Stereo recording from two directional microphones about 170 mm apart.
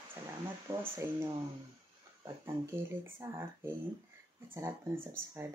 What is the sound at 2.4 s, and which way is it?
Speech, 15° right (ahead or behind).